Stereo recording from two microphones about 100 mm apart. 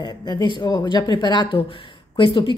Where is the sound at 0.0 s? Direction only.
45° left (ahead or behind).